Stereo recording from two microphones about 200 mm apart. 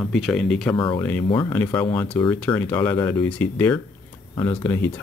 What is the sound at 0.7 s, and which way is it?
Speech, 25° left (ahead or behind).